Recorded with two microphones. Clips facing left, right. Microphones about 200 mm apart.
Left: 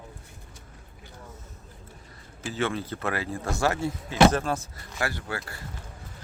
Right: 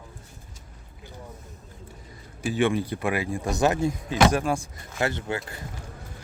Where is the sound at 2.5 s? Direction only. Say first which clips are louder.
Right 5 dB; 15° right (ahead or behind).